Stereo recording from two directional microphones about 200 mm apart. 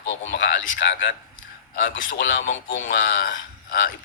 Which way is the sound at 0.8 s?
65° left (ahead or behind).